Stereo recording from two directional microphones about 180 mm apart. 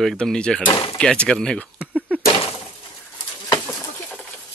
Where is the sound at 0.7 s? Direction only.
30° left (ahead or behind).